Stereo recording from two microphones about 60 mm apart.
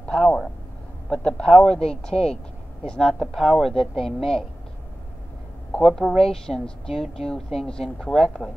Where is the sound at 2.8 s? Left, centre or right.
Centre.